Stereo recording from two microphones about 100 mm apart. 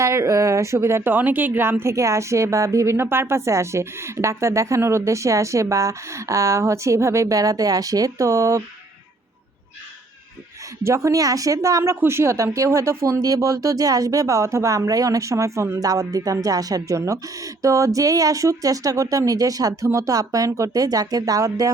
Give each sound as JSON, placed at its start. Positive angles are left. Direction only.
{"t": 0.0, "sound": "speech", "side_deg": -30}
{"t": 10.8, "sound": "speech", "side_deg": -30}